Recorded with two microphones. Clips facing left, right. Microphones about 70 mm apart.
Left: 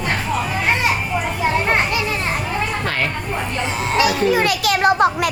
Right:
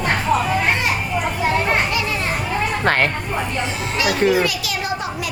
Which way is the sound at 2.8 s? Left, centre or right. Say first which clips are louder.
Right 5 dB; right.